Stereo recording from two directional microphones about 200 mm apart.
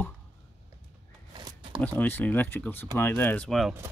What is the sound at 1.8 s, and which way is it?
Speech, 10° left (ahead or behind).